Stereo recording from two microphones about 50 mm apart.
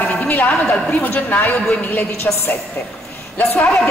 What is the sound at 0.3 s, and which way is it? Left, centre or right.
A man's voice, left.